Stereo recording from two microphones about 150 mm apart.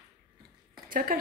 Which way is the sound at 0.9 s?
65° right (ahead or behind).